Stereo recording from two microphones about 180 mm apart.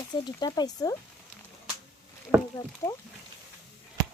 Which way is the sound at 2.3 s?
15° right (ahead or behind).